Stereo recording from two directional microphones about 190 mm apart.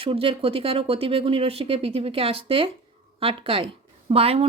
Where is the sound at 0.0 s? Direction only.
30° right (ahead or behind).